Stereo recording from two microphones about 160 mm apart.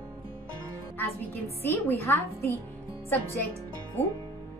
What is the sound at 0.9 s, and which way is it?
A woman's voice, 15° left (ahead or behind).